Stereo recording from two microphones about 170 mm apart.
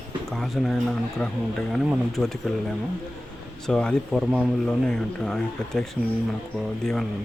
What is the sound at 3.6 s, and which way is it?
Speech, 5° left (ahead or behind).